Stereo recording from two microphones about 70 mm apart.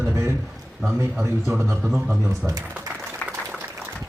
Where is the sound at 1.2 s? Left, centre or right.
Right.